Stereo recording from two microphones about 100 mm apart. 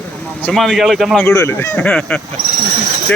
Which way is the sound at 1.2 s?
30° left (ahead or behind).